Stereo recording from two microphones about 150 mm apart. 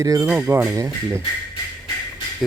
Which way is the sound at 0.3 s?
15° right (ahead or behind).